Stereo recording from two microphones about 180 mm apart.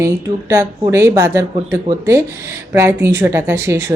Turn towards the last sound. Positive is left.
turn(degrees=-15)  # may be behind; listen again after turning